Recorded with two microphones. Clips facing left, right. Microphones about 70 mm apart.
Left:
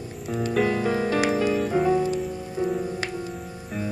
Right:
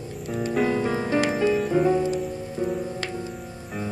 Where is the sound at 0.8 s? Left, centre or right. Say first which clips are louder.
Left 1 dB; centre.